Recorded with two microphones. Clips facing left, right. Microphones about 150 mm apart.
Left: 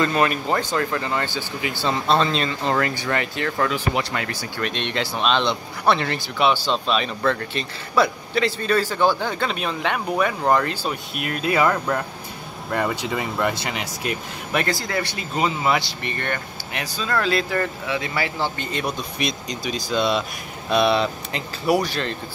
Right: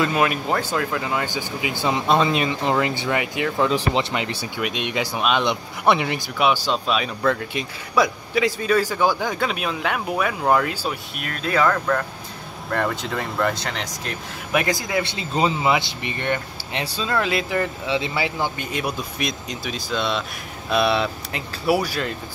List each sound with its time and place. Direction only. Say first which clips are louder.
0.0 s speech: even; 5° right (ahead or behind); by 4.4 s 20° right (ahead or behind)
4.6 s speech: even; 10° right (ahead or behind)
11.1 s speech: left 2 dB; 5° left (ahead or behind)
12.6 s speech: even; 5° left (ahead or behind)
14.5 s speech: right 2 dB; 15° right (ahead or behind)
16.8 s speech: right 2 dB; 30° right (ahead or behind)
17.1 s speech: left 1 dB; 15° right (ahead or behind)